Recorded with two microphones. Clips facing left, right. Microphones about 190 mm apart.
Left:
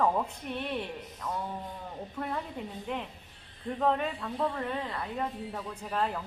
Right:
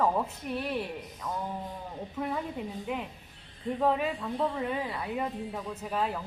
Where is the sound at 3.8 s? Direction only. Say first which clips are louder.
Right 1 dB; 5° right (ahead or behind).